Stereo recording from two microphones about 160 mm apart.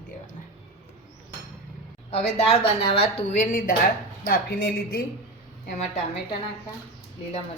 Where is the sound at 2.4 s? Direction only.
40° left (ahead or behind); by 5.0 s 65° left (ahead or behind).